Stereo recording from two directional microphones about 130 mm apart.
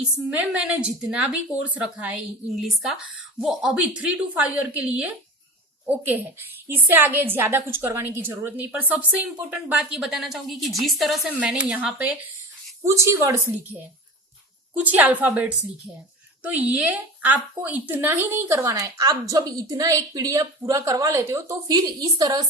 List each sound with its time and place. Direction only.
0.3 s a woman's voice: 10° right (ahead or behind)
3.4 s a woman's voice: 5° right (ahead or behind)
12.8 s a woman's voice: 20° right (ahead or behind)
14.7 s a woman's voice: 15° right (ahead or behind)